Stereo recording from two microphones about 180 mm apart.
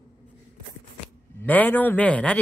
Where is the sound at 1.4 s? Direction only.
10° left (ahead or behind).